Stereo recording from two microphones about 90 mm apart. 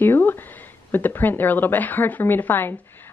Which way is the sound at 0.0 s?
20° left (ahead or behind).